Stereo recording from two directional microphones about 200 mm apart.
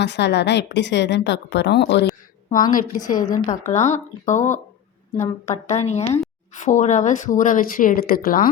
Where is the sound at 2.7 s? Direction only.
40° left (ahead or behind).